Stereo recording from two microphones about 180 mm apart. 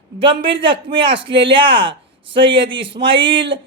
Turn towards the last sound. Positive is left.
turn(degrees=-30)  # may be behind; listen again after turning